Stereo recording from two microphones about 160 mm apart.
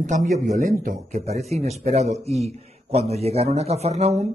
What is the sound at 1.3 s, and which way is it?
A man's voice, 45° right (ahead or behind).